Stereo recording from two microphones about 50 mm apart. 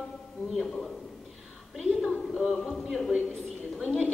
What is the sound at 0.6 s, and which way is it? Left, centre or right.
Speech, centre.